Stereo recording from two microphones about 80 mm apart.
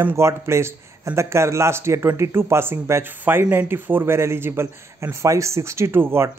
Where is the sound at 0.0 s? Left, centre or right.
Right.